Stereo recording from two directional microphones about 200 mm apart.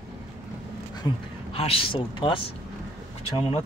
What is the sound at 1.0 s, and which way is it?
Speech, 20° left (ahead or behind).